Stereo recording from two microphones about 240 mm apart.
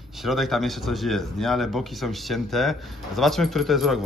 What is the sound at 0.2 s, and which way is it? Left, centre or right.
Speech, centre.